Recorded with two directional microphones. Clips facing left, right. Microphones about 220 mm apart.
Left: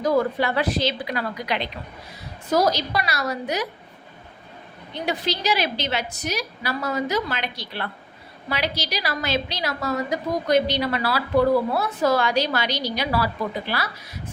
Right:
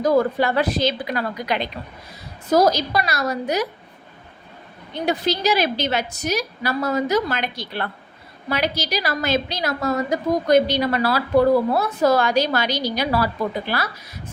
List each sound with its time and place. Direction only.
0.0 s a woman's voice: 45° right (ahead or behind)
5.0 s a woman's voice: 45° right (ahead or behind)